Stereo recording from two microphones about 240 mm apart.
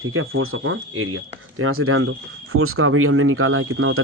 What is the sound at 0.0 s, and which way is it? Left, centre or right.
Speech, right.